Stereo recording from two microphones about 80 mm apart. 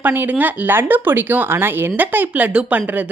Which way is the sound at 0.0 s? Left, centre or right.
Right.